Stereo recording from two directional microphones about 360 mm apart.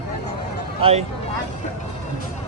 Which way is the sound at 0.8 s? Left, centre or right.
Centre.